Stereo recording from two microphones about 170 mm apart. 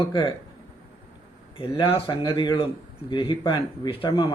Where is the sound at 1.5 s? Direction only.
30° left (ahead or behind).